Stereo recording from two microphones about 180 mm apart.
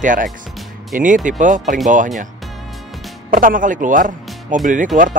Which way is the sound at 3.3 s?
50° right (ahead or behind).